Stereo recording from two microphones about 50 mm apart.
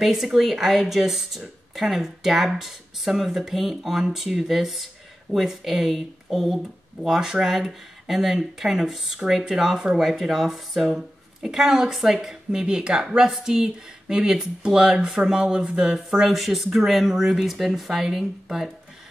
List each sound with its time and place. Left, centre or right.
0.0 s speech: centre